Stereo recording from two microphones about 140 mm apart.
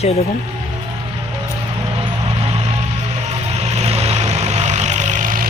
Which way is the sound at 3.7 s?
50° right (ahead or behind).